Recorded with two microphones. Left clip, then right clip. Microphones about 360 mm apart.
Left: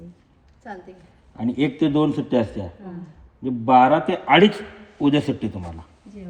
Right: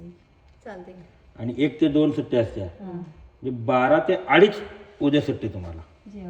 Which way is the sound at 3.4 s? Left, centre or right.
Centre.